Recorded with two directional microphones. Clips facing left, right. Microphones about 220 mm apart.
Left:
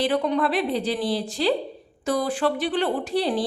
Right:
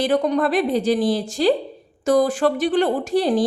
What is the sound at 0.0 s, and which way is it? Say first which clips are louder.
A woman's voice: right 3 dB; 45° right (ahead or behind).